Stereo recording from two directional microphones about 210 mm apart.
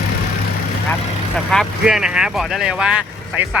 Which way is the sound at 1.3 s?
Centre (ahead or behind).